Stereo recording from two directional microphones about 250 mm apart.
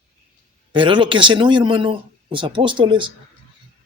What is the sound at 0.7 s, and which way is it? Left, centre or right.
Speech, centre.